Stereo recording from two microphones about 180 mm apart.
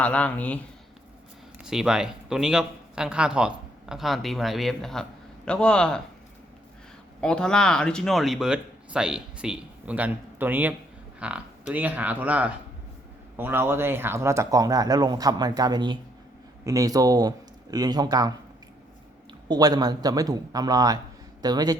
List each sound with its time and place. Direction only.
0.0 s a man's voice: 10° left (ahead or behind)
1.6 s speech: 5° right (ahead or behind)
7.2 s speech: 5° left (ahead or behind); by 18.3 s 20° right (ahead or behind)
19.5 s speech: 20° right (ahead or behind)